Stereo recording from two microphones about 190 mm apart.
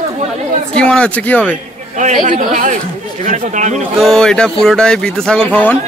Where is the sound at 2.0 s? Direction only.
40° right (ahead or behind).